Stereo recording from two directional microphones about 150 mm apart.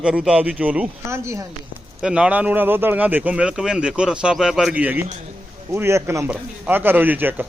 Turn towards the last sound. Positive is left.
turn(degrees=-15)  # may be behind; listen again after turning